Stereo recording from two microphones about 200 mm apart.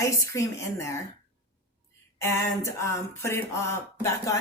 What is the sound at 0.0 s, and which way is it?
Speech, 15° left (ahead or behind).